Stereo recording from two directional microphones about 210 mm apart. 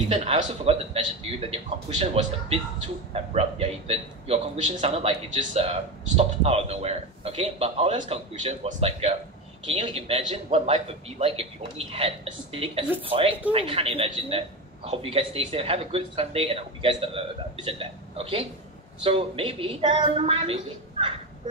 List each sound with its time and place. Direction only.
0.1 s a man's voice: 30° right (ahead or behind)